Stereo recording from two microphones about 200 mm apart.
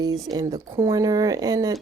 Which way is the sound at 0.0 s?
20° right (ahead or behind).